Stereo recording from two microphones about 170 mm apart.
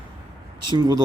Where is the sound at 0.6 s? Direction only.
25° right (ahead or behind).